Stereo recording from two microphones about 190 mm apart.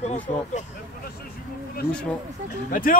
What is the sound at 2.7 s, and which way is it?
Speech, 45° left (ahead or behind).